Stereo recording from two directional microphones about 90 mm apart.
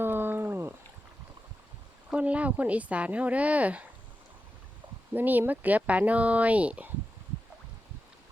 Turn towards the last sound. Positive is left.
turn(degrees=-15)  # may be behind; listen again after turning